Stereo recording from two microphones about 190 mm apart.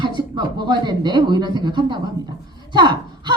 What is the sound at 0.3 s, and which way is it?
A woman's voice, 25° right (ahead or behind).